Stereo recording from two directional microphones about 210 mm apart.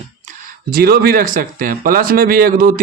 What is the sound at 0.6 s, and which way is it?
Speech, 45° right (ahead or behind).